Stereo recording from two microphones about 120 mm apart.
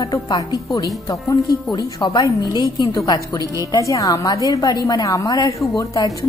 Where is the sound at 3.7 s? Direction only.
25° left (ahead or behind).